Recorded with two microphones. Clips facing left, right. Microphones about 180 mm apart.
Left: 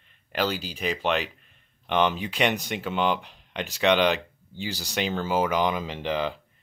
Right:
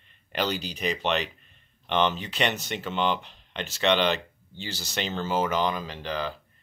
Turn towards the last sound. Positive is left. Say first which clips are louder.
# left 4 dB
turn(degrees=20)  # may be behind; listen again after turning